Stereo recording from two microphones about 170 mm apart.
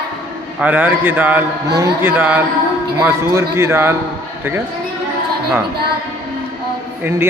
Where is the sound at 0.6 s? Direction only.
10° right (ahead or behind).